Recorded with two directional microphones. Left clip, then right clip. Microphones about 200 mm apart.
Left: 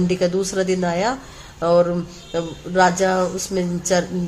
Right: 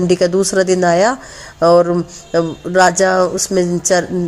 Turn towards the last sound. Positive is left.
turn(degrees=-40)  # may be behind; listen again after turning